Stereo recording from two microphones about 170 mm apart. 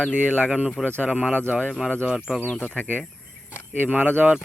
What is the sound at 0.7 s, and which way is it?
Speech, 5° left (ahead or behind).